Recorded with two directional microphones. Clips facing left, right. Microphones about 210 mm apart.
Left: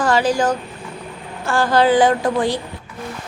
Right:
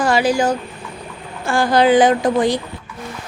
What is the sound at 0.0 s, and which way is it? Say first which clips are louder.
A woman's voice: right 1 dB; 10° right (ahead or behind).